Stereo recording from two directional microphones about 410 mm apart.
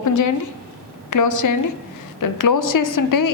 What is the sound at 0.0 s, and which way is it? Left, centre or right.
Speech, left.